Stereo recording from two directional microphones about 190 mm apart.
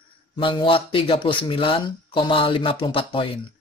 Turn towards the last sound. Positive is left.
turn(degrees=25)  # may be behind; listen again after turning